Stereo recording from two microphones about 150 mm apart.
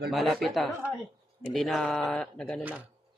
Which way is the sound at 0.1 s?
Centre (ahead or behind).